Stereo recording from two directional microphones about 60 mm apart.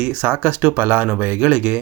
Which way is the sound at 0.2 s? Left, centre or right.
Right.